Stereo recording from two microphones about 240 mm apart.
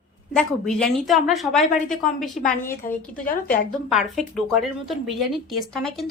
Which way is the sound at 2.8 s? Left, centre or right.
Left.